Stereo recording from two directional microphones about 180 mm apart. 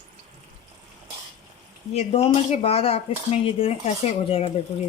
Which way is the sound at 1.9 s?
35° left (ahead or behind).